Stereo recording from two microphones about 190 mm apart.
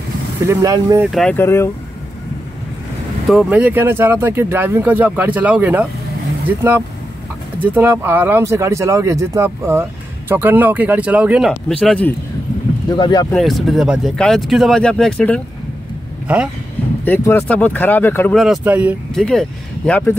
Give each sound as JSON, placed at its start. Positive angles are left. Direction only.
{"t": 0.5, "sound": "speech", "side_deg": -20}
{"t": 1.0, "sound": "speech", "side_deg": 5}
{"t": 3.3, "sound": "speech", "side_deg": -5}
{"t": 7.5, "sound": "speech", "side_deg": -10}
{"t": 12.9, "sound": "speech", "side_deg": 25}
{"t": 13.3, "sound": "speech", "side_deg": 0}
{"t": 17.0, "sound": "speech", "side_deg": 10}
{"t": 18.4, "sound": "speech", "side_deg": -5}
{"t": 19.9, "sound": "speech", "side_deg": 10}